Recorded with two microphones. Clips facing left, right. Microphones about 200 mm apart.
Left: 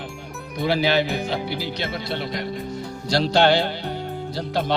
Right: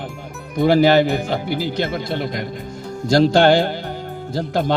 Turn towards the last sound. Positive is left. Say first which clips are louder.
# right 4 dB
turn(degrees=-50)  # may be behind; listen again after turning